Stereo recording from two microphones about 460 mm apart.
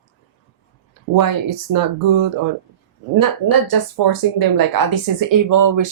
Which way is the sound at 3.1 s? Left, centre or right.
Right.